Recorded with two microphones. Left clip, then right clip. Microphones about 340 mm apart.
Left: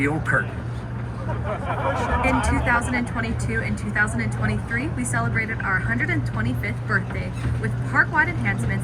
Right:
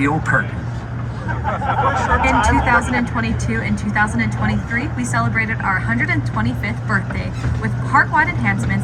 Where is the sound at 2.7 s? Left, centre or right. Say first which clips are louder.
Right 6 dB; right.